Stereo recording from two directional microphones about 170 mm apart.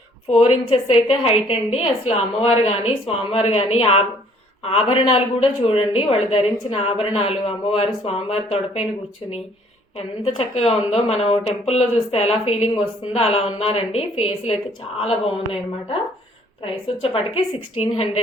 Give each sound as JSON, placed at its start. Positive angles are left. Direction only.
{"t": 0.3, "sound": "speech", "side_deg": 35}
{"t": 10.3, "sound": "speech", "side_deg": 40}
{"t": 16.6, "sound": "speech", "side_deg": 35}